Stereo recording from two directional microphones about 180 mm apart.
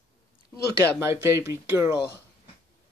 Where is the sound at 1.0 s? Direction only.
15° right (ahead or behind).